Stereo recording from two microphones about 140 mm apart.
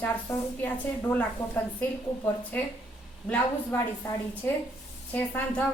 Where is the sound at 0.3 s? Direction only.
10° left (ahead or behind).